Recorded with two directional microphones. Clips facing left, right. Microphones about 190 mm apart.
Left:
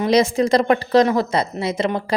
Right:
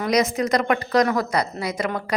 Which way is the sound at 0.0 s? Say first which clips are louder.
Left 4 dB; 30° left (ahead or behind).